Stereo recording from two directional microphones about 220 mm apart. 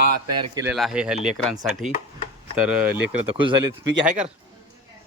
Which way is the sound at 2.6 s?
5° right (ahead or behind).